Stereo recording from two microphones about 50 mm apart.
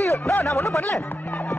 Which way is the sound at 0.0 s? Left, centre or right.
Left.